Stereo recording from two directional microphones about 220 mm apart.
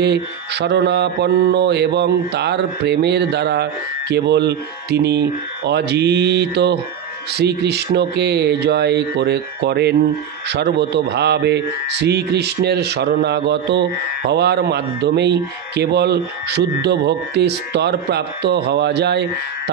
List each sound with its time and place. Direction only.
0.0 s a man's voice: 50° right (ahead or behind)